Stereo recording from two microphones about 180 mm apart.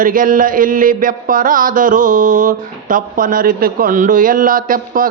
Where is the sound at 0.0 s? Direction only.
50° right (ahead or behind).